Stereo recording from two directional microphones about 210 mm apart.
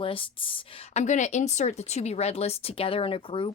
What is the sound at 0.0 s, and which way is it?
Speech, 25° left (ahead or behind).